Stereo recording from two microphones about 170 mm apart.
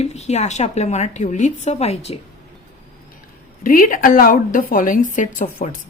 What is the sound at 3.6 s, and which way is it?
Speech, 50° left (ahead or behind).